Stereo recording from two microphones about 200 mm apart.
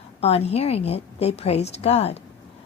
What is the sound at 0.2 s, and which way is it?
A woman's voice, 30° left (ahead or behind).